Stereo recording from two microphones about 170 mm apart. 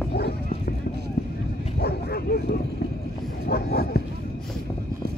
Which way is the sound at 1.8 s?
70° left (ahead or behind).